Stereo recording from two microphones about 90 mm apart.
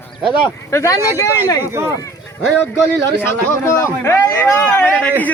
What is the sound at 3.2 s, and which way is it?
A man's voice, 30° left (ahead or behind).